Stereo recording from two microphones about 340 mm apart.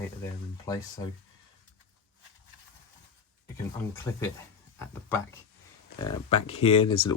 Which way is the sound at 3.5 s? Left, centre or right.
Centre.